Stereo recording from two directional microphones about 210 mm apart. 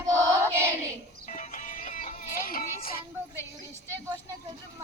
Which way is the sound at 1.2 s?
40° left (ahead or behind).